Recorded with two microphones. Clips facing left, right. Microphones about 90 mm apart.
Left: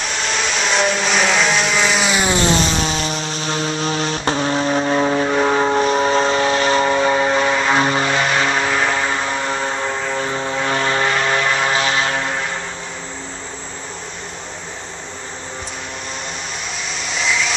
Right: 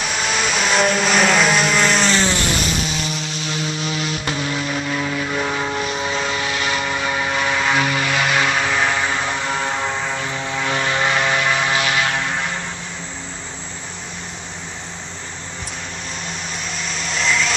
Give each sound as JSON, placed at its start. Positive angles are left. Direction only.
{"t": 0.0, "sound": "vehicle", "side_deg": 0}
{"t": 2.8, "sound": "vehicle", "side_deg": 35}
{"t": 8.5, "sound": "vehicle", "side_deg": 0}
{"t": 10.2, "sound": "vehicle", "side_deg": 35}
{"t": 11.1, "sound": "vehicle", "side_deg": -5}
{"t": 11.8, "sound": "vehicle", "side_deg": 30}
{"t": 16.9, "sound": "vacuum cleaner", "side_deg": 0}